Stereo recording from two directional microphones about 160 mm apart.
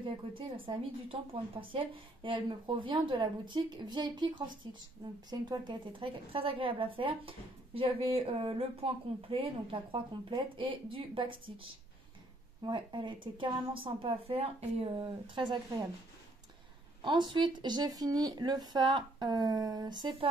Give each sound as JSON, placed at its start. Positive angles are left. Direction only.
{"t": 0.0, "sound": "a woman's voice", "side_deg": -30}
{"t": 12.6, "sound": "a woman's voice", "side_deg": -30}
{"t": 17.0, "sound": "speech", "side_deg": -30}